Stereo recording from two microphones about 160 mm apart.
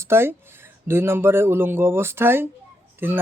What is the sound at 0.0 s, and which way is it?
Speech, 15° right (ahead or behind).